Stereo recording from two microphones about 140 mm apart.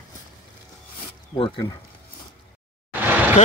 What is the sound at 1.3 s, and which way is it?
Speech, 40° left (ahead or behind).